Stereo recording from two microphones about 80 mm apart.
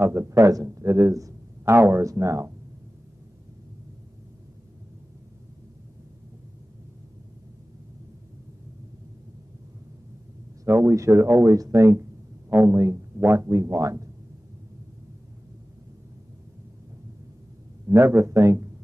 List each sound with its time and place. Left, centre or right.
0.0 s speech: right
1.6 s speech: right
10.9 s speech: right
17.8 s speech: right